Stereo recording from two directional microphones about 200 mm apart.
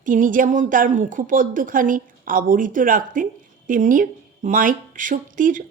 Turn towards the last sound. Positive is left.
turn(degrees=-40)  # may be behind; listen again after turning